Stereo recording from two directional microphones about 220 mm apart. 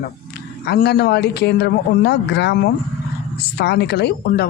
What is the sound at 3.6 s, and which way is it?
Speech, 50° left (ahead or behind).